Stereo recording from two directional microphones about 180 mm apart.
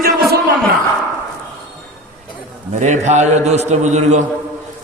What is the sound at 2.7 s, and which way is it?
A man's voice, 40° right (ahead or behind).